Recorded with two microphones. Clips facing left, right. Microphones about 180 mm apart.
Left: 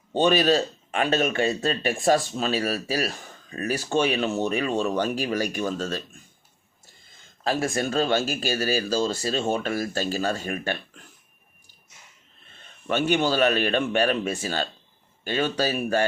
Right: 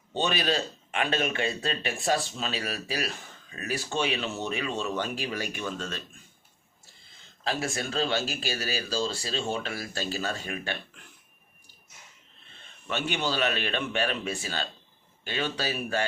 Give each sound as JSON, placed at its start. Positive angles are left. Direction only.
{"t": 0.1, "sound": "speech", "side_deg": 45}
{"t": 7.4, "sound": "speech", "side_deg": 50}
{"t": 12.9, "sound": "speech", "side_deg": 45}